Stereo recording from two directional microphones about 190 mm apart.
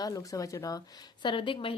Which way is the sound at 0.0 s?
20° left (ahead or behind).